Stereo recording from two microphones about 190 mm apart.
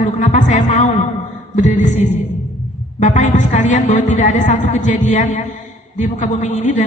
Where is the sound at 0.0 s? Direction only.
40° left (ahead or behind).